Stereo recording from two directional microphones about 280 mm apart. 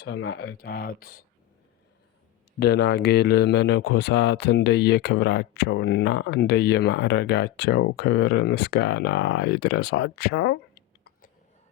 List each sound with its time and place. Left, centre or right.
0.0 s speech: left
2.6 s speech: left